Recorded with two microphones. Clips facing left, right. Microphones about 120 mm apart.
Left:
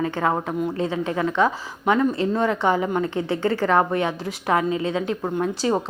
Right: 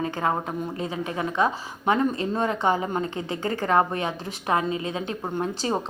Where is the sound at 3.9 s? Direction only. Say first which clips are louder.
Left 5 dB; 20° right (ahead or behind).